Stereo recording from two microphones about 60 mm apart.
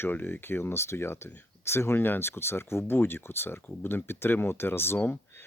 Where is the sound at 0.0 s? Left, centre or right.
Left.